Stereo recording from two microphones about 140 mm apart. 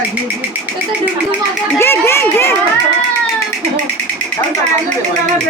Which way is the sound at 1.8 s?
20° left (ahead or behind).